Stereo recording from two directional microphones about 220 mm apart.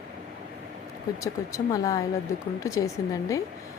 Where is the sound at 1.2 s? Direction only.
15° left (ahead or behind).